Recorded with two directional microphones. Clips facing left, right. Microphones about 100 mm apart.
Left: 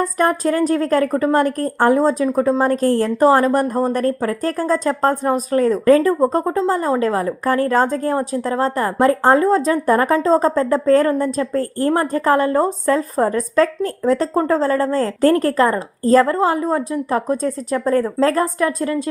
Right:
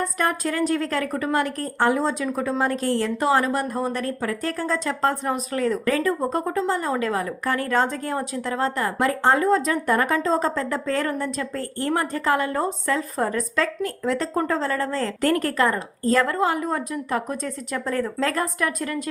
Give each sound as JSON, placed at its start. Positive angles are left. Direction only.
{"t": 0.0, "sound": "a woman's voice", "side_deg": 40}